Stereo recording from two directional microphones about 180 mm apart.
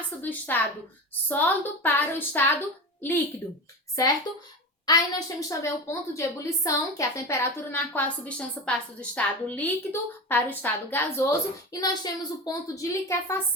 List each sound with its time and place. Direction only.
0.2 s a woman's voice: 10° left (ahead or behind)
4.0 s a woman's voice: 20° left (ahead or behind)